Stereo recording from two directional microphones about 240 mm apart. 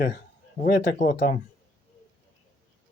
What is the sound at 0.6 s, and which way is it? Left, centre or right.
Speech, left.